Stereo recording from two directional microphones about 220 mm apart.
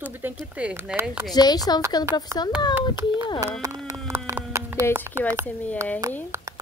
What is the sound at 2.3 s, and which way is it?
Speech, 15° right (ahead or behind).